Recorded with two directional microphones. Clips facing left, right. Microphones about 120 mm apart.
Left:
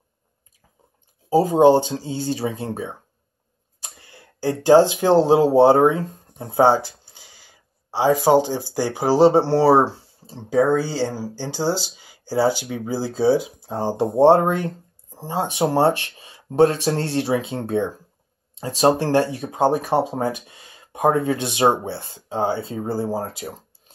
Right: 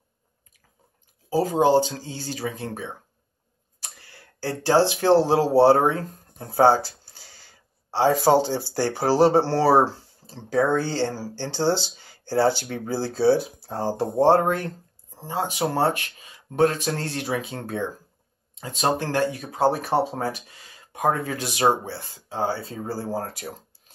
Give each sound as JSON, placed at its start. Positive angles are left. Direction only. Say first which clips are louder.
{"t": 1.3, "sound": "speech", "louder": "left 5 dB", "side_deg": 25}
{"t": 10.5, "sound": "speech", "louder": "left 3 dB", "side_deg": 10}